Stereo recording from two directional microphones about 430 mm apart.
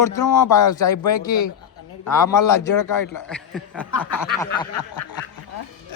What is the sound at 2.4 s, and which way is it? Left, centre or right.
Speech, left.